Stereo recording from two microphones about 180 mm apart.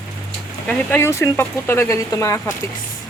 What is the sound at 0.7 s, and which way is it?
Speech, 10° left (ahead or behind).